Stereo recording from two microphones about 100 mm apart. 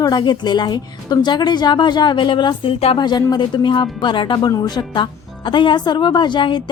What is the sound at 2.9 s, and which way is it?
A woman's voice, 45° left (ahead or behind).